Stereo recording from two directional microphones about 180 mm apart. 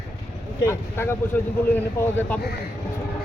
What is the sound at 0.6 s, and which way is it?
A man's voice, 15° left (ahead or behind).